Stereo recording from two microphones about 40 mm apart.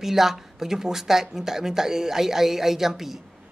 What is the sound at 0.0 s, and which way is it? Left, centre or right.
Speech, centre.